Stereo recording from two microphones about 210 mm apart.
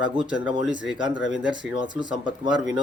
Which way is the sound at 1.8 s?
20° right (ahead or behind).